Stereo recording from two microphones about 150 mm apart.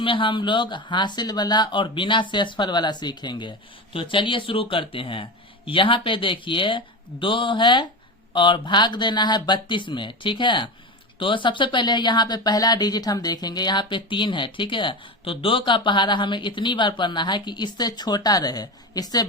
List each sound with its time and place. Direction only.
0.0 s speech: 35° left (ahead or behind)